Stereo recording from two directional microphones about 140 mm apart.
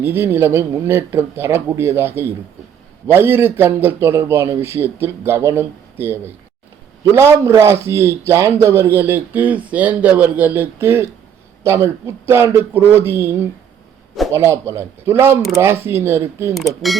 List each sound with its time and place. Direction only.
0.0 s speech: 15° right (ahead or behind)
14.3 s speech: 20° right (ahead or behind)
16.6 s speech: centre (ahead or behind)